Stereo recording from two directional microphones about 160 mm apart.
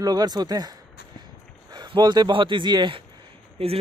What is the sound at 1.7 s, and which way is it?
Speech, 25° right (ahead or behind).